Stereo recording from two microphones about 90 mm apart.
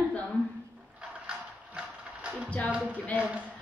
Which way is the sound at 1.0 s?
10° right (ahead or behind).